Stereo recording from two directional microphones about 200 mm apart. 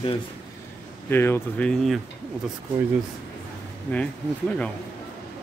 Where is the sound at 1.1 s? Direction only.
10° left (ahead or behind).